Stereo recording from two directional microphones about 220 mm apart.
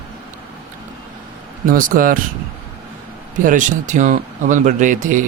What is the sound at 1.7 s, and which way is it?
Speech, 40° right (ahead or behind).